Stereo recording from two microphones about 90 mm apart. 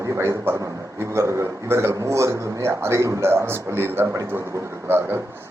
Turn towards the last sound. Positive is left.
turn(degrees=-25)  # may be behind; listen again after turning